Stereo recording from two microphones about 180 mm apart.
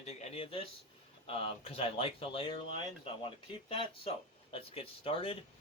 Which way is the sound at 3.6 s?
30° left (ahead or behind).